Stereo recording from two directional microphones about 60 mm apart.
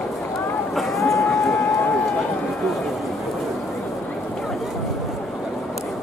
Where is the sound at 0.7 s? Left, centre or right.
Centre.